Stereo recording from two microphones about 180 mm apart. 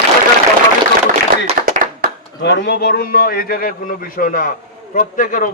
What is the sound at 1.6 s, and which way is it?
Clapping, 50° right (ahead or behind).